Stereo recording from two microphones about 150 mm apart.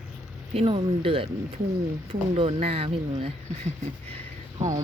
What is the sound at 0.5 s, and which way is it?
Speech, 40° right (ahead or behind).